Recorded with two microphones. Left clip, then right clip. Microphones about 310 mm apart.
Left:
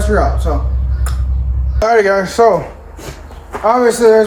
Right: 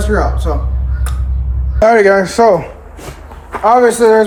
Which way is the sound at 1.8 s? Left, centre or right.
Right.